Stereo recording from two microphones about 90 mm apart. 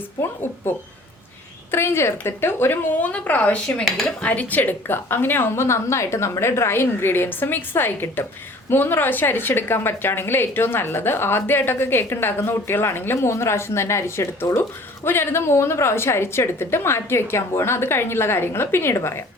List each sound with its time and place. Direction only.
0.2 s a woman's voice: 25° left (ahead or behind)
3.8 s speech: centre (ahead or behind)
4.2 s a woman's voice: 15° left (ahead or behind)